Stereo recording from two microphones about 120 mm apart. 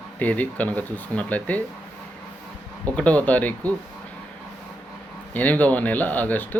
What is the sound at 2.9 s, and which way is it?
Speech, 10° left (ahead or behind).